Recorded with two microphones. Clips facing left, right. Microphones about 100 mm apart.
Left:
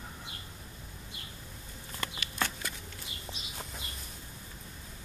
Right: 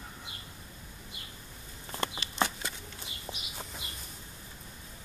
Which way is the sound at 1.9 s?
25° right (ahead or behind).